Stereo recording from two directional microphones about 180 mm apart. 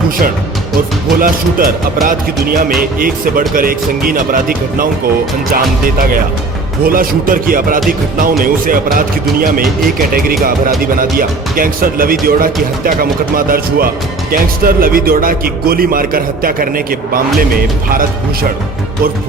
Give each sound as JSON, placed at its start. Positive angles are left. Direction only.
{"t": 1.2, "sound": "speech", "side_deg": -50}
{"t": 6.0, "sound": "speech", "side_deg": -50}